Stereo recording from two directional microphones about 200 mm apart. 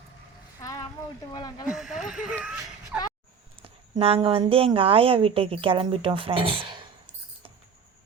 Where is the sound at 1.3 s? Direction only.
20° left (ahead or behind).